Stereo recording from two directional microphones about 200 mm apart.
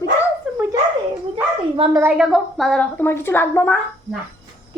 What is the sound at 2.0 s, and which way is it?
A woman's voice, 5° right (ahead or behind).